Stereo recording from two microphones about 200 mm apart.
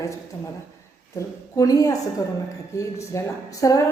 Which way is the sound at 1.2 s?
15° left (ahead or behind).